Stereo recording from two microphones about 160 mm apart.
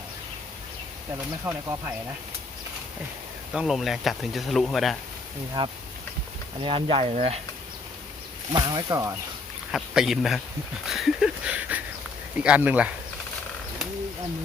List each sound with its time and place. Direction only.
1.5 s speech: 15° right (ahead or behind)
3.5 s speech: 5° right (ahead or behind)
5.6 s speech: 30° right (ahead or behind)
8.5 s speech: 30° right (ahead or behind)
9.7 s speech: centre (ahead or behind)